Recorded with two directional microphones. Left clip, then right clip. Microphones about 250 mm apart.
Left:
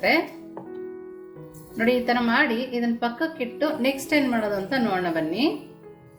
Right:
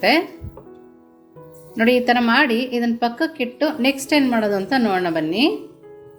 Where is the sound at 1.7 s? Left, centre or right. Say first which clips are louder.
Right 6 dB; right.